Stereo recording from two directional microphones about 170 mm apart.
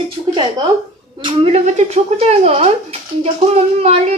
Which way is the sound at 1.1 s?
30° right (ahead or behind).